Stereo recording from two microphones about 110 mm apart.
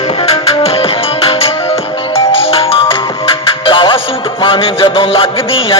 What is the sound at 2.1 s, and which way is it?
Ringtone, 60° left (ahead or behind).